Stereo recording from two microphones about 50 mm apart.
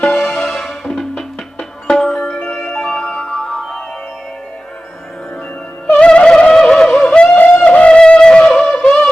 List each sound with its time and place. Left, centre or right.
0.0 s music: centre
2.6 s glockenspiel: centre
3.2 s music: centre
3.5 s music: centre
5.9 s music: left
7.3 s music: left; by 9.0 s centre